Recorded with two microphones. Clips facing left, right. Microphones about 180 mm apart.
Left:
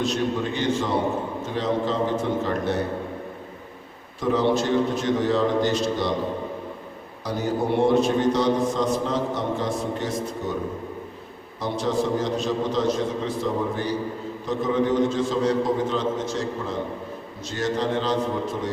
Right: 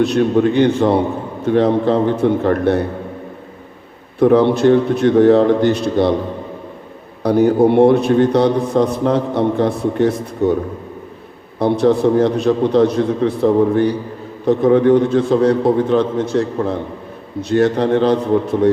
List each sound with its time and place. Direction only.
0.0 s a man's voice: 60° right (ahead or behind)
4.2 s a man's voice: 60° right (ahead or behind)
7.2 s a man's voice: 60° right (ahead or behind)
11.6 s a man's voice: 60° right (ahead or behind)